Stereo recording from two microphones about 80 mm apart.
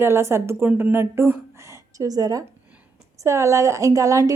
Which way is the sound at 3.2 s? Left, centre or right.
Right.